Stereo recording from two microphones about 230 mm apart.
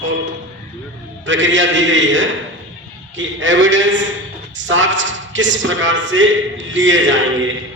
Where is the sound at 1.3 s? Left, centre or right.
Right.